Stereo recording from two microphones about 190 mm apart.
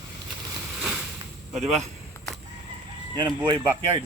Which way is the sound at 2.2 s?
15° left (ahead or behind).